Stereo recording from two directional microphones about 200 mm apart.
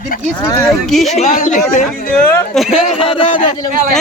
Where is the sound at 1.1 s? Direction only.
35° left (ahead or behind).